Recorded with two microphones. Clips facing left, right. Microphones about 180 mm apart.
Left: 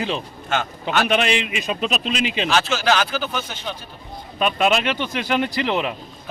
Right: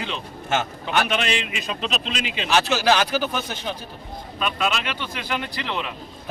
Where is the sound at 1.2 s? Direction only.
15° left (ahead or behind).